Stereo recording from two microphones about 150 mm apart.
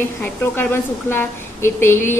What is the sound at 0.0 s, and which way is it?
A woman's voice, 15° left (ahead or behind).